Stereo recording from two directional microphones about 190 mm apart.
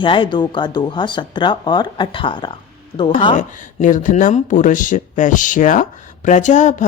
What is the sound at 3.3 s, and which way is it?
Speech, 40° left (ahead or behind).